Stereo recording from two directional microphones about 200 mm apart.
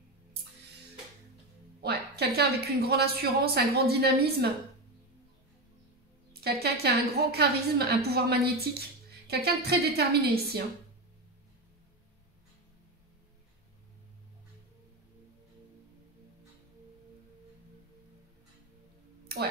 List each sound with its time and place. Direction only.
1.8 s a woman's voice: 55° right (ahead or behind)
6.4 s a woman's voice: 50° right (ahead or behind)